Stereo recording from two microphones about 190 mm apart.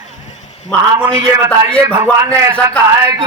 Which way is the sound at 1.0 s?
20° right (ahead or behind).